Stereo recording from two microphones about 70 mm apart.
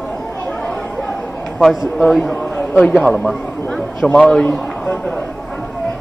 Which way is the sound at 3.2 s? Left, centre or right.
Centre.